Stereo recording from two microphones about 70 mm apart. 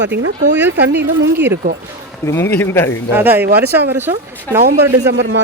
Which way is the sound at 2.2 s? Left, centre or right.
Left.